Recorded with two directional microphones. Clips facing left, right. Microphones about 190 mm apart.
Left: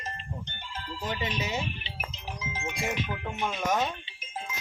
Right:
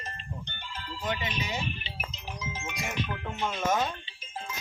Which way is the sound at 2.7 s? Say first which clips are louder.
Left 3 dB; 25° left (ahead or behind).